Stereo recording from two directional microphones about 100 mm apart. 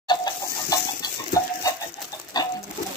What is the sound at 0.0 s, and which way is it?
Chicken, 45° left (ahead or behind).